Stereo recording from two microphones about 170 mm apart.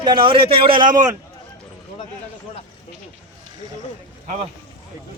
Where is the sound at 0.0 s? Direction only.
30° right (ahead or behind).